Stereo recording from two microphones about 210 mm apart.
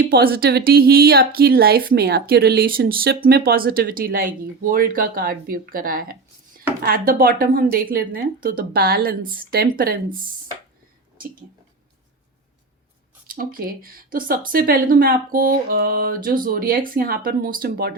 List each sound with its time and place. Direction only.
0.1 s a woman's voice: 45° right (ahead or behind)
13.2 s a woman's voice: 40° right (ahead or behind)